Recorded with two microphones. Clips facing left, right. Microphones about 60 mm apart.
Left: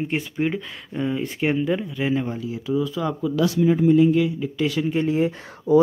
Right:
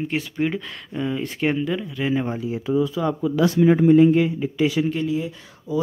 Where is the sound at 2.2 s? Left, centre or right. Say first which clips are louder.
Right 2 dB; right.